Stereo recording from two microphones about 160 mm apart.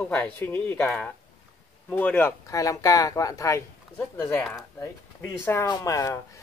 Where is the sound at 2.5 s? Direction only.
20° left (ahead or behind).